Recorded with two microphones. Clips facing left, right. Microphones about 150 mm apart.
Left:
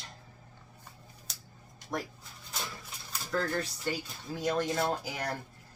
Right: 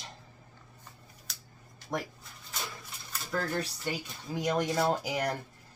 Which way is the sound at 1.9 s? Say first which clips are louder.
Right 1 dB; 20° right (ahead or behind).